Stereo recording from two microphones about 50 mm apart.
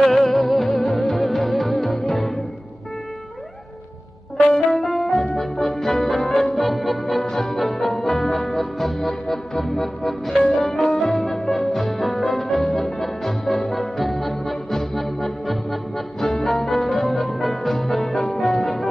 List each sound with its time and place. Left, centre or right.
0.0 s music: centre
4.5 s music: centre